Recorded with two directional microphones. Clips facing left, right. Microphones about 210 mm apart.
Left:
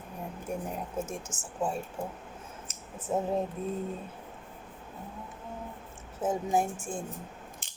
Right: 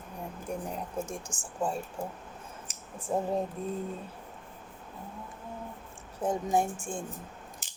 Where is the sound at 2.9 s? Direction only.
5° left (ahead or behind).